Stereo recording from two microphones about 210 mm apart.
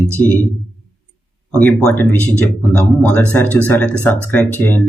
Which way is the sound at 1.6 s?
5° left (ahead or behind).